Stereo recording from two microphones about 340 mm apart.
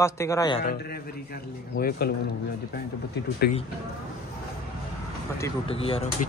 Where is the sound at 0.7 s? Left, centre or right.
Left.